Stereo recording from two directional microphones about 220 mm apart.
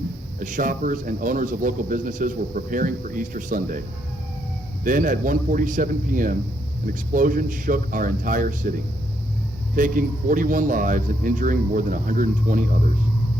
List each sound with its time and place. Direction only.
0.3 s speech: 35° right (ahead or behind)
9.7 s speech: 35° right (ahead or behind)